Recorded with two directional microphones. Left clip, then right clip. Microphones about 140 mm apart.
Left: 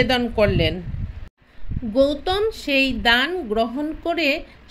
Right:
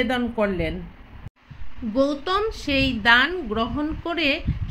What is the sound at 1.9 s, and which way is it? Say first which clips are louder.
Speech: left 3 dB; 40° left (ahead or behind).